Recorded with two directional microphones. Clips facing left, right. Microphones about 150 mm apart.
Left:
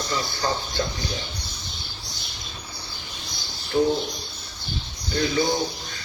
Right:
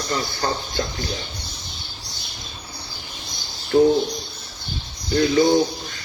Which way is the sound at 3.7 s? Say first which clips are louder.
Right 6 dB; 40° right (ahead or behind).